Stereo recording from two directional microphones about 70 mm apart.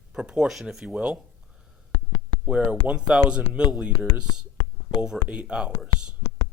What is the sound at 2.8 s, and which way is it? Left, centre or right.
Speech, centre.